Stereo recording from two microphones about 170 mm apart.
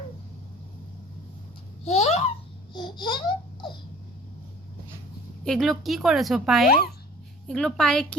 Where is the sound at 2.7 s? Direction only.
25° left (ahead or behind).